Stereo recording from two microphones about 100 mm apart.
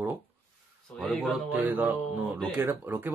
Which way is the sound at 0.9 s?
Centre (ahead or behind).